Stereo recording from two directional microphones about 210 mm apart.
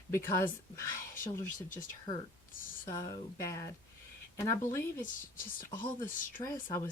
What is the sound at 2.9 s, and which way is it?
Speech, 15° left (ahead or behind).